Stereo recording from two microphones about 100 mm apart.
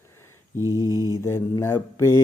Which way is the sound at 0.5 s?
30° right (ahead or behind).